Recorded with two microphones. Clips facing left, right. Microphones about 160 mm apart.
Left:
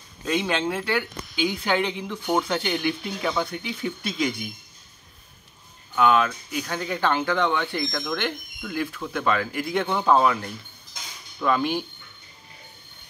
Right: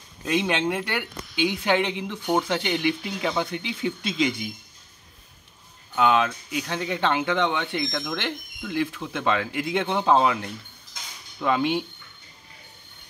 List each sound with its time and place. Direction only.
0.2 s speech: 15° right (ahead or behind)
5.9 s speech: 20° right (ahead or behind)